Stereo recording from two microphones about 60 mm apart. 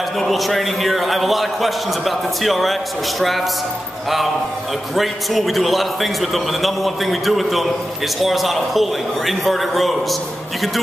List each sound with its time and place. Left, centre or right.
0.2 s a man's voice: centre
4.9 s a man's voice: centre